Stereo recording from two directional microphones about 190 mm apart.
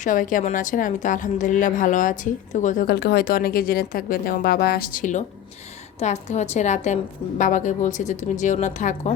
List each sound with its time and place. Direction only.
0.0 s a woman's voice: 45° left (ahead or behind)
2.8 s a woman's voice: 60° left (ahead or behind); by 9.1 s 40° left (ahead or behind)